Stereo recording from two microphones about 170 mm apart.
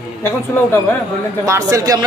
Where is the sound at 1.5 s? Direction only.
20° right (ahead or behind).